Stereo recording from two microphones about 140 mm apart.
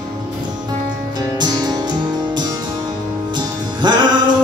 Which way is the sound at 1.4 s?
30° right (ahead or behind).